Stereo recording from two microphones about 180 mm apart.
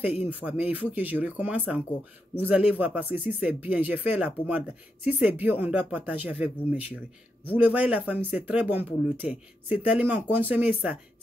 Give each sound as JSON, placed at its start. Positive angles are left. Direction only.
{"t": 0.3, "sound": "speech", "side_deg": -10}